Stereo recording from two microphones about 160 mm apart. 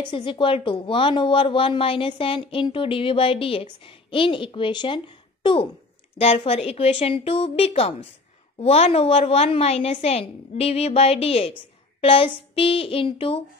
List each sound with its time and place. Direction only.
0.0 s speech: 30° left (ahead or behind)